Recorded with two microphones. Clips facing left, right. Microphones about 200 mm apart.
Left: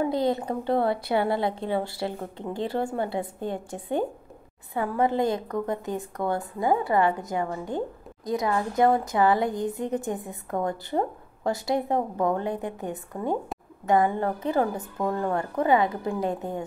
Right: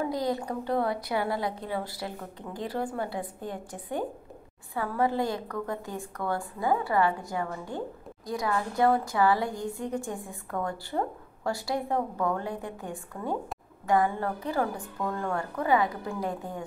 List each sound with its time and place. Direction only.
0.1 s a woman's voice: 25° left (ahead or behind)